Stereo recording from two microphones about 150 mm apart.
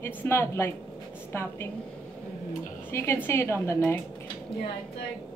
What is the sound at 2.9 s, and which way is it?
A woman's voice, 15° left (ahead or behind).